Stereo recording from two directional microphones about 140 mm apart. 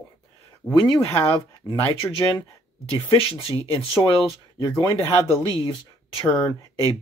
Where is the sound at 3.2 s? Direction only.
40° left (ahead or behind).